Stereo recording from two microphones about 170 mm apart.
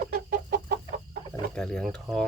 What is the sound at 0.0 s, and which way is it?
Chicken, 60° right (ahead or behind).